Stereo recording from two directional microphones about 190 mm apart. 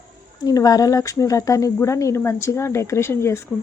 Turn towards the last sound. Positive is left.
turn(degrees=15)  # may be behind; listen again after turning